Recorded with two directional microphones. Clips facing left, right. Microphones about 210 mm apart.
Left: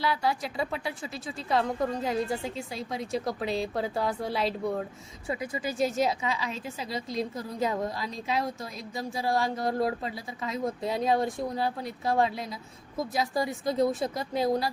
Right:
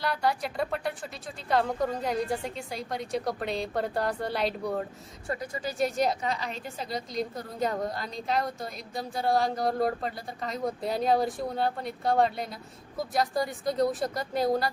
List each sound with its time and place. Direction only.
0.0 s a woman's voice: centre (ahead or behind)